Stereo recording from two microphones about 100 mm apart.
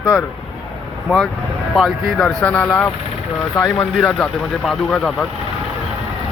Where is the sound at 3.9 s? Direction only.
5° left (ahead or behind).